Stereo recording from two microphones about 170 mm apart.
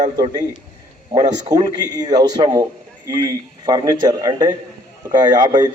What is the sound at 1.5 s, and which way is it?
A man's voice, 25° right (ahead or behind).